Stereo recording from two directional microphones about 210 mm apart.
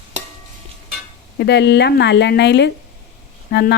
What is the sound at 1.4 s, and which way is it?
Speech, 55° left (ahead or behind).